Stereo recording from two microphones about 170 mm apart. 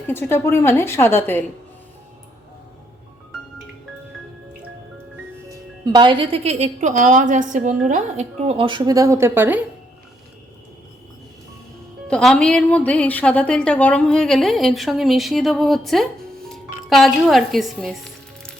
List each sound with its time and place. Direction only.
0.1 s a woman's voice: 15° left (ahead or behind)
5.5 s speech: 25° right (ahead or behind)
12.0 s a woman's voice: 5° left (ahead or behind)